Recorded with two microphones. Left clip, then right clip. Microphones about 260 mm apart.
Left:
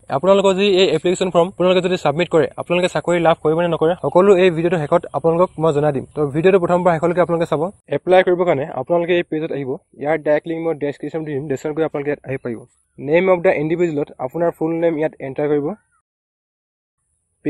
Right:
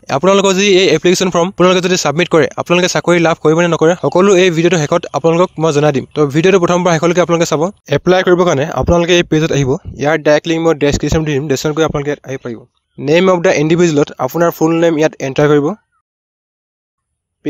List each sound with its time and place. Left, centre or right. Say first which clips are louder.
0.1 s a man's voice: right 3 dB; right
7.8 s speech: even; right; by 12.5 s centre
13.0 s speech: right 4 dB; right